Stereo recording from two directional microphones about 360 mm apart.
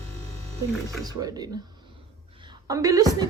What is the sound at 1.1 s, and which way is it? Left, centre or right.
A woman's voice, centre.